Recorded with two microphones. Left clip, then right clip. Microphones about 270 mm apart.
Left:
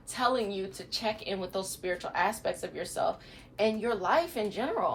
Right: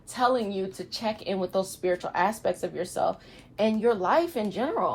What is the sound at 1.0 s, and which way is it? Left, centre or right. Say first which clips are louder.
A woman's voice: right 5 dB; centre.